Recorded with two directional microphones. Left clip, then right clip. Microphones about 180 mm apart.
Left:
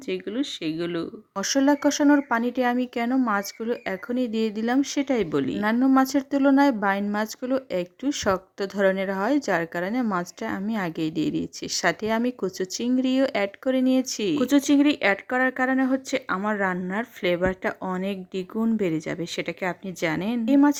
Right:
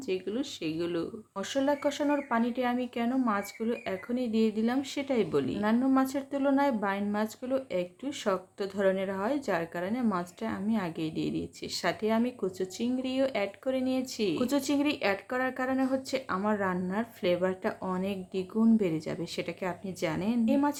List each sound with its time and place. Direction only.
0.1 s speech: 40° left (ahead or behind)